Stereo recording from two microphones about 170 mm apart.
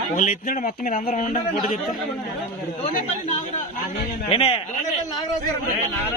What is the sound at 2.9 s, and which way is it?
Speech, 45° left (ahead or behind).